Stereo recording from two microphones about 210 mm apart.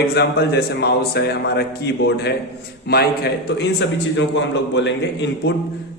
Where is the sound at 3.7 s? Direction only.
60° left (ahead or behind).